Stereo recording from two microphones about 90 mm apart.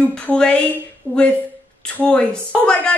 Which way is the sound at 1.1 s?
20° right (ahead or behind).